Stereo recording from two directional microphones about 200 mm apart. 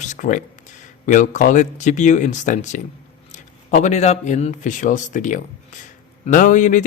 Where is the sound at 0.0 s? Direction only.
40° left (ahead or behind).